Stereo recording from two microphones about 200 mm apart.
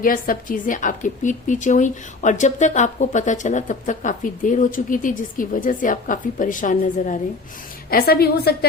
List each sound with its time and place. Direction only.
0.0 s a woman's voice: 45° left (ahead or behind)